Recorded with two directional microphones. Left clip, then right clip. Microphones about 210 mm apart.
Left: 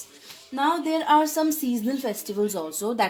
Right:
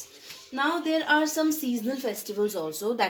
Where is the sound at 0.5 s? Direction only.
50° left (ahead or behind).